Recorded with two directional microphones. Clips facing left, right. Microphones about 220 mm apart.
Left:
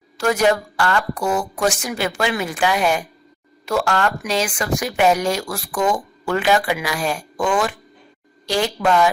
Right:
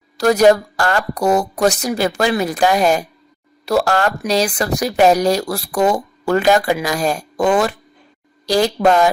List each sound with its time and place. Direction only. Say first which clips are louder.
0.2 s speech: right 6 dB; 40° right (ahead or behind)